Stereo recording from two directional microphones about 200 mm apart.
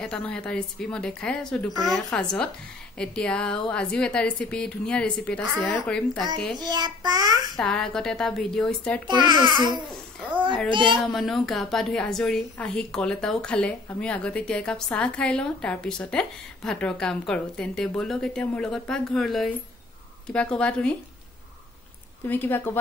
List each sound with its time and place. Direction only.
0.0 s a woman's voice: 5° left (ahead or behind)
6.6 s a child's voice: 20° right (ahead or behind)
7.5 s a woman's voice: 5° left (ahead or behind)
9.0 s a child's voice: 20° right (ahead or behind)
11.1 s a woman's voice: centre (ahead or behind)
22.2 s a woman's voice: 10° left (ahead or behind)